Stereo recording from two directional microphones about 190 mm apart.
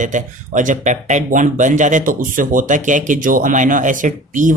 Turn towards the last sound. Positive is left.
turn(degrees=-40)  # may be behind; listen again after turning